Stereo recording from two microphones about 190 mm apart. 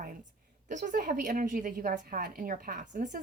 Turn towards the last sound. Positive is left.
turn(degrees=-40)  # may be behind; listen again after turning